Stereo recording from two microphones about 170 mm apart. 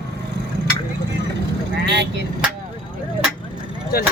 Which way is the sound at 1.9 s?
90° right.